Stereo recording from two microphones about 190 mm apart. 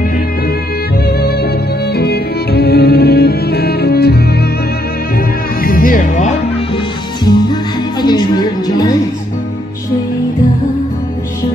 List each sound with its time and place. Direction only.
1.0 s music: 55° left (ahead or behind)
5.6 s music: 50° left (ahead or behind)
7.2 s music: 20° left (ahead or behind)